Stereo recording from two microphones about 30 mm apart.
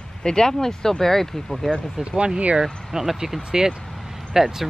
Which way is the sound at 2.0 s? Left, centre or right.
Right.